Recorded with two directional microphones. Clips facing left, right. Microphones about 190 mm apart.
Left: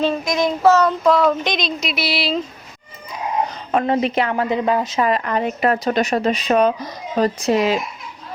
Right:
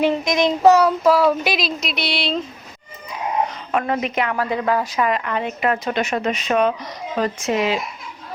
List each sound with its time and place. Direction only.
0.0 s speech: 20° right (ahead or behind); by 2.4 s centre (ahead or behind)
3.7 s a woman's voice: 30° left (ahead or behind)
4.9 s speech: 35° left (ahead or behind)